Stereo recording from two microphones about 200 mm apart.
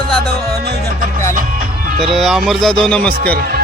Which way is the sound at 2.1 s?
Centre (ahead or behind).